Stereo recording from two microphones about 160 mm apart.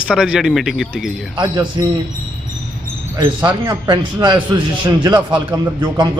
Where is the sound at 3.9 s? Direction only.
30° right (ahead or behind).